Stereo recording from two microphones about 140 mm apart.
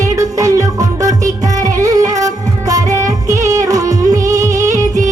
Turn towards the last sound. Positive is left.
turn(degrees=-25)  # may be behind; listen again after turning